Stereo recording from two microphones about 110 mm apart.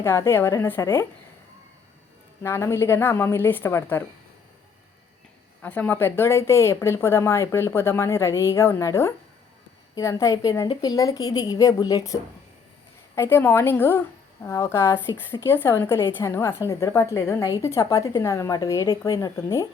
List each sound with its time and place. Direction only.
0.0 s speech: 25° left (ahead or behind)
2.4 s speech: 25° left (ahead or behind)
5.6 s a woman's voice: 15° left (ahead or behind)